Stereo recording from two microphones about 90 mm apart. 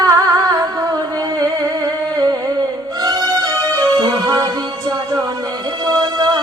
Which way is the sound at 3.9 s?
50° right (ahead or behind).